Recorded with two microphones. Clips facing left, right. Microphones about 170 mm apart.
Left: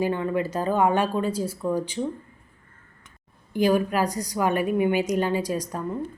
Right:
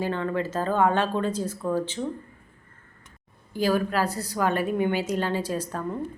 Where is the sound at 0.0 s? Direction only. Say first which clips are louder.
Left 2 dB; 15° left (ahead or behind).